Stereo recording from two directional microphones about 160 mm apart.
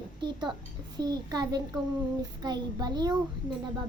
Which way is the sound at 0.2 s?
30° right (ahead or behind).